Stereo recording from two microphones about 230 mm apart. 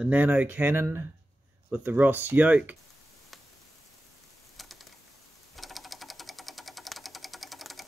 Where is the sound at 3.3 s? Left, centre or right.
Centre.